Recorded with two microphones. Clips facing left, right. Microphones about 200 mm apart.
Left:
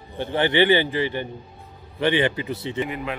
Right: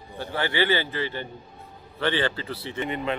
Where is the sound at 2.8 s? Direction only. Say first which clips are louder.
Right 1 dB; 5° left (ahead or behind).